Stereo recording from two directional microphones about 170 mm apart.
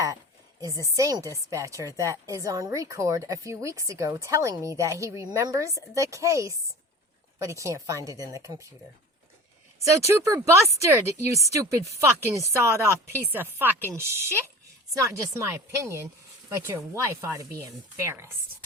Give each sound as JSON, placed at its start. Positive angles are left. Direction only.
{"t": 0.9, "sound": "speech", "side_deg": -20}
{"t": 10.1, "sound": "speech", "side_deg": -15}